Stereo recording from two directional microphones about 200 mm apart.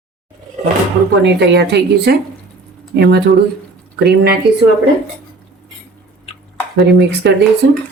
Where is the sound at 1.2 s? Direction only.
55° right (ahead or behind).